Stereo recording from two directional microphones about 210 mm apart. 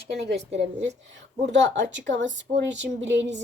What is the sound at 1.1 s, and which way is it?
Speech, 60° right (ahead or behind).